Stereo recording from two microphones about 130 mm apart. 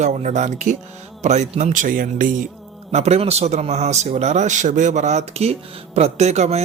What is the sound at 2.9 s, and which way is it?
A man's voice, 55° right (ahead or behind).